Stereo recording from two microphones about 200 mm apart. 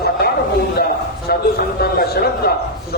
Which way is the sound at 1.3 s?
50° left (ahead or behind).